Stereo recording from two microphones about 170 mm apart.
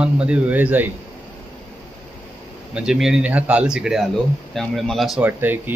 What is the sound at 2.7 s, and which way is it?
Speech, 5° right (ahead or behind).